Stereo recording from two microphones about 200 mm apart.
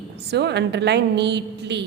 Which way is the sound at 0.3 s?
55° right (ahead or behind).